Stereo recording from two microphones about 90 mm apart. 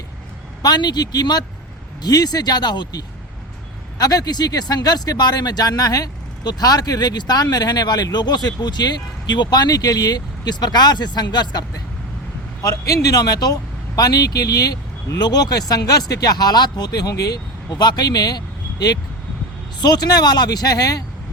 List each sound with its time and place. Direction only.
0.6 s speech: 50° left (ahead or behind)
19.8 s speech: 50° left (ahead or behind)